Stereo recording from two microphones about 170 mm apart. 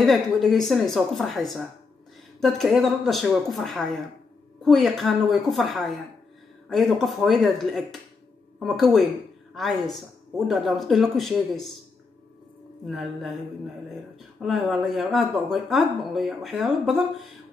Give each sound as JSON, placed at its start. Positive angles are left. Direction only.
{"t": 0.0, "sound": "a woman's voice", "side_deg": 0}
{"t": 12.8, "sound": "a woman's voice", "side_deg": 0}
{"t": 14.4, "sound": "a woman's voice", "side_deg": 0}